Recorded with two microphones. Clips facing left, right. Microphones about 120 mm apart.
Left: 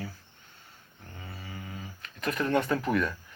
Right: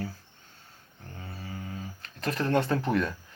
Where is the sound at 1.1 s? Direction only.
40° right (ahead or behind).